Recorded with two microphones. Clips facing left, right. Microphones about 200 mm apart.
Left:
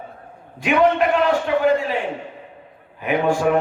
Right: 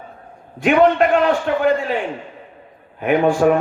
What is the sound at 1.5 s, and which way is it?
Music, 50° right (ahead or behind).